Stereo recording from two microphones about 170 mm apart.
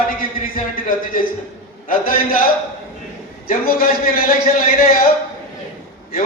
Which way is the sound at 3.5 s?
60° left (ahead or behind).